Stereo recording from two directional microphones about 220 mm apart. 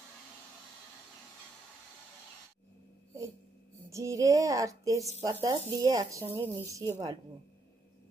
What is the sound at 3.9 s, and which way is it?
Child singing, 15° right (ahead or behind).